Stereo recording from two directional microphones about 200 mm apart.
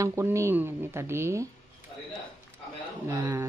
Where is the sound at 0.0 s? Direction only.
15° right (ahead or behind).